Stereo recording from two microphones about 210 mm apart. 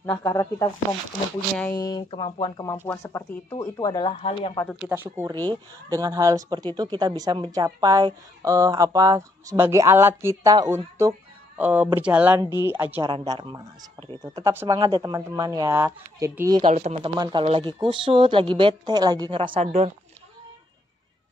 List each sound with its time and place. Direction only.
0.0 s speech: 20° left (ahead or behind)
4.1 s speech: 30° left (ahead or behind)
4.6 s a woman's voice: 5° right (ahead or behind)
13.0 s a woman's voice: 25° right (ahead or behind)
16.6 s a woman's voice: 35° right (ahead or behind)
19.5 s speech: 30° right (ahead or behind)